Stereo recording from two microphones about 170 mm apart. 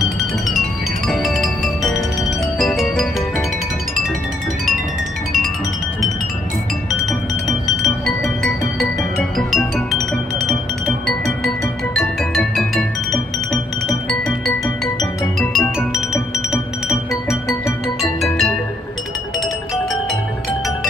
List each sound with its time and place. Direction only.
0.0 s music: centre (ahead or behind)
6.9 s music: centre (ahead or behind)
16.5 s music: 20° left (ahead or behind)
17.8 s music: centre (ahead or behind)